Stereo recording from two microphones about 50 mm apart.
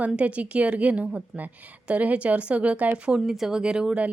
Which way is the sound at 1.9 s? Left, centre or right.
Right.